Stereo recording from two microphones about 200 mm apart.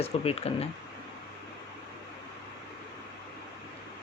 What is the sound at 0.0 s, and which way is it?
Speech, 30° left (ahead or behind).